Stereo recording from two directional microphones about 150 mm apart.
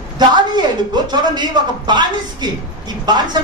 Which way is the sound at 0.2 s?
30° right (ahead or behind).